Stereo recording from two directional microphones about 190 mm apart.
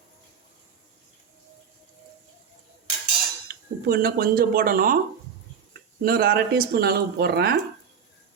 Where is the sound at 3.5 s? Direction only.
55° right (ahead or behind).